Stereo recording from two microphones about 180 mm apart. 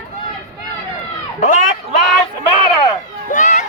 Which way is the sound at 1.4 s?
45° left (ahead or behind).